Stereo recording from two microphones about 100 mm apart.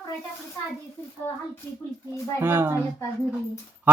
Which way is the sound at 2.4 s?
25° right (ahead or behind).